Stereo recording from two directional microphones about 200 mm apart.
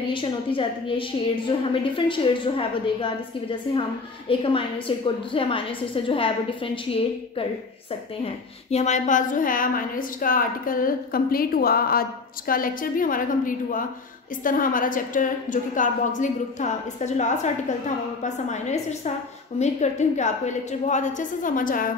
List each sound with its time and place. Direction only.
0.6 s a woman's voice: 25° left (ahead or behind)
8.6 s a woman's voice: 35° left (ahead or behind)